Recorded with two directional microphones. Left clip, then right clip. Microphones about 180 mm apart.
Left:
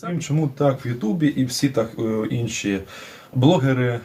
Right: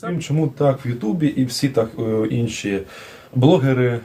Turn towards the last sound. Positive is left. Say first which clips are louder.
# right 3 dB
turn(degrees=-10)  # may be behind; listen again after turning